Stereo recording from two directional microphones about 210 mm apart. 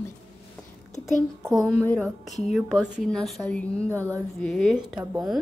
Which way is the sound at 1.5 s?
5° left (ahead or behind).